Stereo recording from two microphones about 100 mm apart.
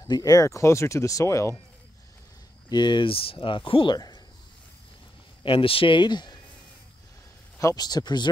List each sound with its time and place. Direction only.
0.1 s speech: 35° left (ahead or behind)
2.7 s speech: 50° left (ahead or behind)
3.9 s speech: 45° left (ahead or behind)
5.4 s speech: 60° left (ahead or behind)
7.7 s speech: 45° left (ahead or behind)